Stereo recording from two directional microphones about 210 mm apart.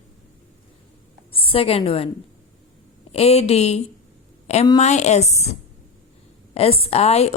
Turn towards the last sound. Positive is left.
turn(degrees=30)  # may be behind; listen again after turning